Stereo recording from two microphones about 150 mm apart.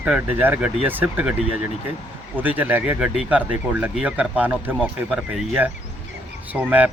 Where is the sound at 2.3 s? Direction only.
10° right (ahead or behind).